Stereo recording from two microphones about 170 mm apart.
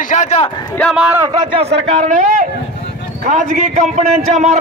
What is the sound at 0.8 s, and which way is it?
Speech, centre (ahead or behind).